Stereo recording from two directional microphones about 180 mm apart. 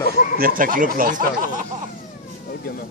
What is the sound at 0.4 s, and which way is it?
Speech, 50° right (ahead or behind).